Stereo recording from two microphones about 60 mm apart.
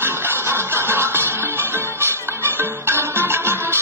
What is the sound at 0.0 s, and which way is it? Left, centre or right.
Music, right.